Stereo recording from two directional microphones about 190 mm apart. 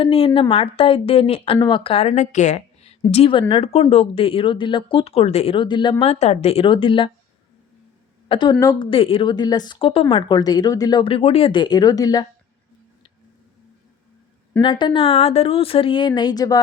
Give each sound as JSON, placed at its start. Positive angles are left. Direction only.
{"t": 0.0, "sound": "a woman's voice", "side_deg": 30}
{"t": 8.3, "sound": "a woman's voice", "side_deg": 25}
{"t": 14.6, "sound": "a woman's voice", "side_deg": 25}